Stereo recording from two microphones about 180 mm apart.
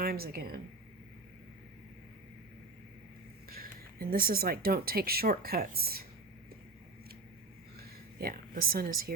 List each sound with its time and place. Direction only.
0.0 s speech: 55° right (ahead or behind)
3.5 s speech: 55° right (ahead or behind)
8.2 s speech: 55° right (ahead or behind)